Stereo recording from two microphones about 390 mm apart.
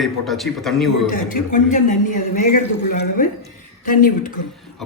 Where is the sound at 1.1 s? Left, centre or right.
Centre.